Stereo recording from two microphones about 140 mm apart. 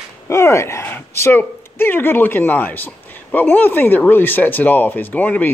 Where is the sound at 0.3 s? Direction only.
20° left (ahead or behind).